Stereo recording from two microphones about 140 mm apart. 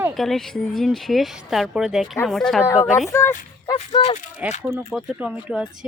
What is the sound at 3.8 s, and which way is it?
Speech, 50° left (ahead or behind).